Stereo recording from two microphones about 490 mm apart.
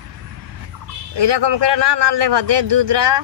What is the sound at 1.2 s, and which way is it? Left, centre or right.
A man's voice, right.